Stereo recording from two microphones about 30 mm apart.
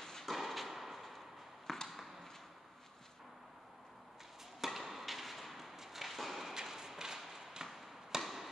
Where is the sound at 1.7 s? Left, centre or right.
Centre.